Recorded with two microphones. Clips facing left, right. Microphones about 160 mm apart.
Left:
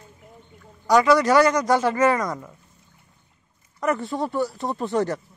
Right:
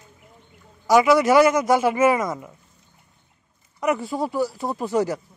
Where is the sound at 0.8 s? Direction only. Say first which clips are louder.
Right 1 dB; 10° right (ahead or behind).